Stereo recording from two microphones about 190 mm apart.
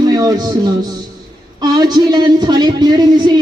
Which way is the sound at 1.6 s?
20° right (ahead or behind).